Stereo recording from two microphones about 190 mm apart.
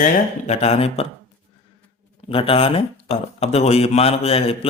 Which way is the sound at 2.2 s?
30° left (ahead or behind).